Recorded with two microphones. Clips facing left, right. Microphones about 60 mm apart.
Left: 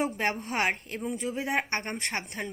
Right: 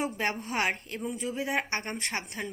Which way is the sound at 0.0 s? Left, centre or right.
Left.